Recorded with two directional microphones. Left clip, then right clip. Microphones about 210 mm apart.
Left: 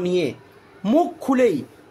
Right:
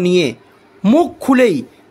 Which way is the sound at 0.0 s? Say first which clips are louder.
Right 7 dB; 45° right (ahead or behind).